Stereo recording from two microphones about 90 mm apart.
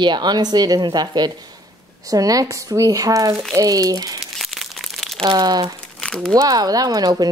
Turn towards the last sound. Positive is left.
turn(degrees=-45)  # may be behind; listen again after turning